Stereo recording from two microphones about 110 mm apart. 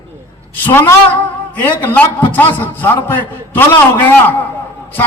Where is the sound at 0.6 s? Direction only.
20° left (ahead or behind).